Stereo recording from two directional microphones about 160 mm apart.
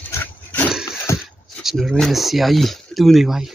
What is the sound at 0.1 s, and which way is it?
Pig, 10° left (ahead or behind).